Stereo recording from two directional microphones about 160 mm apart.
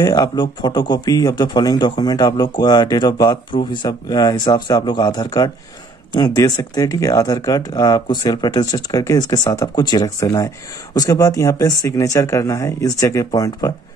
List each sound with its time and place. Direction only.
0.0 s speech: 25° left (ahead or behind)